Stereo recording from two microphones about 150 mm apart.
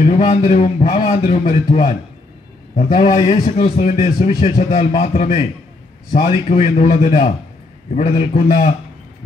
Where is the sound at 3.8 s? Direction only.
55° left (ahead or behind).